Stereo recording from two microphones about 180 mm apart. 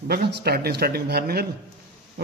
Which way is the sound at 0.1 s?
60° right (ahead or behind).